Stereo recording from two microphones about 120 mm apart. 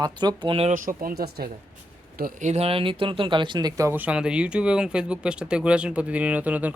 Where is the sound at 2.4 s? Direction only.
65° right (ahead or behind); by 3.9 s 30° right (ahead or behind).